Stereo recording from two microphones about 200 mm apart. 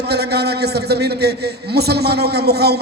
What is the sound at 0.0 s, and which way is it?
A man's voice, 55° right (ahead or behind).